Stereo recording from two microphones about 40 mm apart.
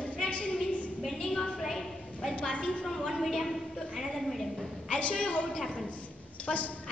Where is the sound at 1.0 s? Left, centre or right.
Centre.